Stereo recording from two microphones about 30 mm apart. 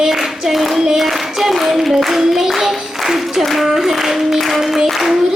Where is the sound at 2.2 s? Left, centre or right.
Centre.